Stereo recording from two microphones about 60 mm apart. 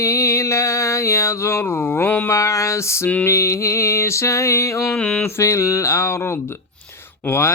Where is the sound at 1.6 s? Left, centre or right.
Left.